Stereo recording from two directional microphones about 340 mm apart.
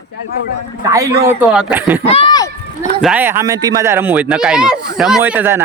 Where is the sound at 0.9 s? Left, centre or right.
Centre.